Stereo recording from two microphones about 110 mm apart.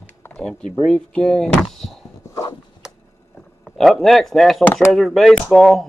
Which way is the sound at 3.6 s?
Centre (ahead or behind).